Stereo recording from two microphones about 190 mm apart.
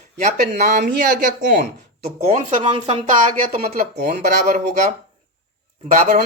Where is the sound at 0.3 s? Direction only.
50° right (ahead or behind).